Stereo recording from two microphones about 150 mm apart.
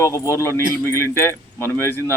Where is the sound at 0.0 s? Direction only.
20° left (ahead or behind).